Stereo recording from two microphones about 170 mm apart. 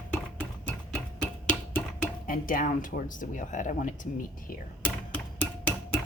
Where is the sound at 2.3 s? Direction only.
55° left (ahead or behind).